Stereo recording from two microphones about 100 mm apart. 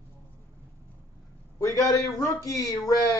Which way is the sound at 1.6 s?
30° left (ahead or behind).